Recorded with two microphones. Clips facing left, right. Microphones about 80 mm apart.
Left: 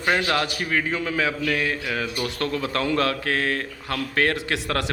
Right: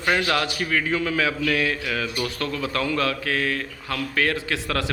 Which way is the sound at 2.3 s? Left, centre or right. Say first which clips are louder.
Left 1 dB; left.